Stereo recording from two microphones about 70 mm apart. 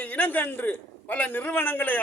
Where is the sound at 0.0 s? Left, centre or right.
Left.